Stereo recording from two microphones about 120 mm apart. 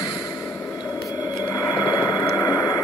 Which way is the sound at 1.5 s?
35° left (ahead or behind).